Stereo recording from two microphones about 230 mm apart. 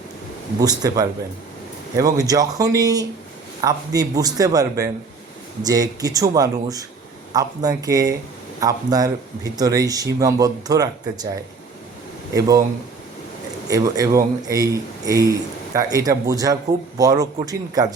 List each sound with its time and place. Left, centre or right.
0.6 s a man's voice: centre
13.7 s a man's voice: centre